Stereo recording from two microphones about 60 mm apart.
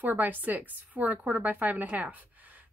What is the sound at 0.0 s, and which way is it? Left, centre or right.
Speech, right.